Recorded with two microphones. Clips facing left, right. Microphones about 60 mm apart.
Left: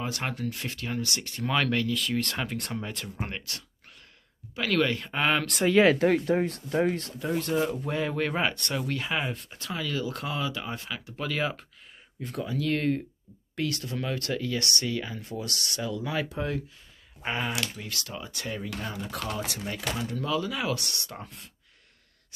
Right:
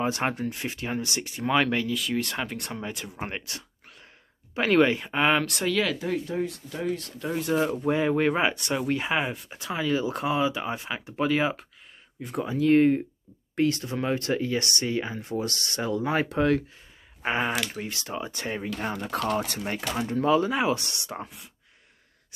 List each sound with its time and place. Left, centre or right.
0.0 s speech: right; by 5.7 s centre
5.7 s speech: left
5.9 s speech: left
7.3 s speech: centre
12.4 s speech: right
16.3 s speech: right
17.2 s speech: right
18.8 s speech: right